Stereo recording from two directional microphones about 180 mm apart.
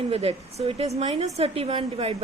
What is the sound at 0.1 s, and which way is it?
A woman's voice, 35° right (ahead or behind).